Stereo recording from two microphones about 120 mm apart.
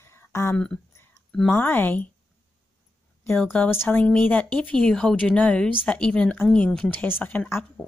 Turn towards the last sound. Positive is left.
turn(degrees=15)  # may be behind; listen again after turning